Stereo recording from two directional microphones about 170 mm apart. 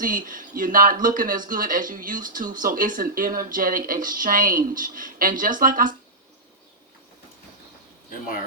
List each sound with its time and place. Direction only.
0.0 s speech: 55° right (ahead or behind)